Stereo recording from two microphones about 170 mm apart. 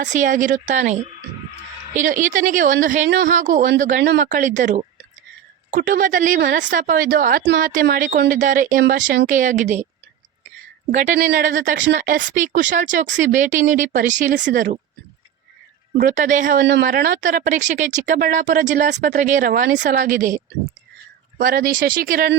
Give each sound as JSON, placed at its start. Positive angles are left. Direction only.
{"t": 0.0, "sound": "speech", "side_deg": -45}
{"t": 10.9, "sound": "speech", "side_deg": -45}
{"t": 11.2, "sound": "speech", "side_deg": -65}
{"t": 16.0, "sound": "speech", "side_deg": -50}
{"t": 16.6, "sound": "speech", "side_deg": -90}
{"t": 16.8, "sound": "speech", "side_deg": -50}